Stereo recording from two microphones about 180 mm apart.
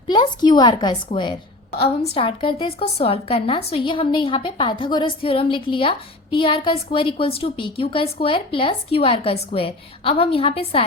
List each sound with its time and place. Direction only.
0.1 s a woman's voice: 25° left (ahead or behind)